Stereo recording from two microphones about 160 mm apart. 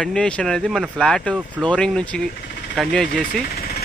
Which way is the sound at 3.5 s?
75° left (ahead or behind).